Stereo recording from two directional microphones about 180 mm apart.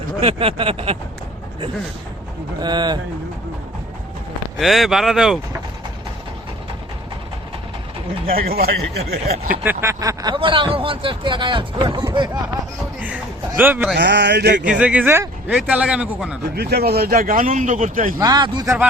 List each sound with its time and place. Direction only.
0.2 s a sound: 30° right (ahead or behind)
2.6 s speech: 25° right (ahead or behind)
4.5 s speech: centre (ahead or behind)
8.3 s speech: 55° right (ahead or behind)
9.6 s speech: 15° right (ahead or behind)
13.5 s speech: 10° right (ahead or behind)
13.9 s a sound: 70° right (ahead or behind)
14.6 s speech: 5° right (ahead or behind)
16.6 s speech: 60° right (ahead or behind)
18.2 s speech: 20° right (ahead or behind)